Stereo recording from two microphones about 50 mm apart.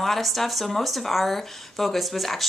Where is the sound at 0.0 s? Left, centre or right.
Centre.